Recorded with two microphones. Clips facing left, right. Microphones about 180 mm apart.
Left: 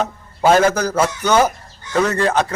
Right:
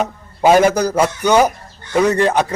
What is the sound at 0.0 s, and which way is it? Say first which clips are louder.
A man's voice: right 2 dB; 15° right (ahead or behind).